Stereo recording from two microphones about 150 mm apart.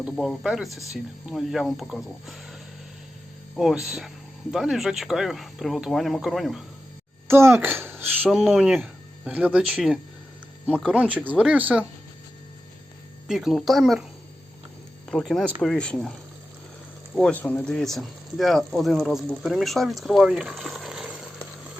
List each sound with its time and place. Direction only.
0.0 s speech: 5° right (ahead or behind)
7.3 s speech: 15° right (ahead or behind)
13.2 s speech: centre (ahead or behind)
15.1 s speech: centre (ahead or behind)
17.2 s speech: 5° left (ahead or behind)